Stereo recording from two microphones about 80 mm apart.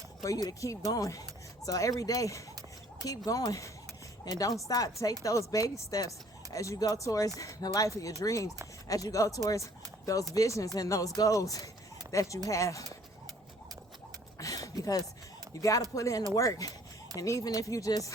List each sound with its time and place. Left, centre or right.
0.4 s speech: left
14.3 s a sound: left
15.5 s speech: left